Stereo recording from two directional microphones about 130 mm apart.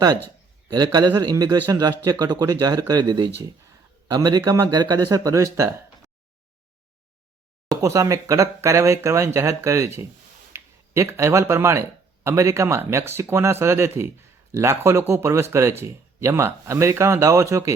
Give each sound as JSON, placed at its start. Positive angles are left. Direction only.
{"t": 0.9, "sound": "a man's voice", "side_deg": -30}
{"t": 7.7, "sound": "speech", "side_deg": -25}